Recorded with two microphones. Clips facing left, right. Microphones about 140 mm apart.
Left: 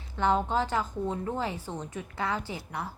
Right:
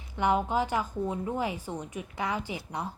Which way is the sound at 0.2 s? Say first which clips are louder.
Even; 15° right (ahead or behind).